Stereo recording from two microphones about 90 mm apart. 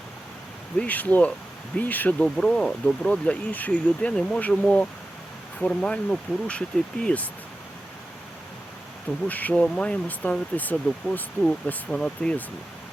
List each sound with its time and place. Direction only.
0.8 s speech: 15° left (ahead or behind)
9.2 s speech: 20° left (ahead or behind)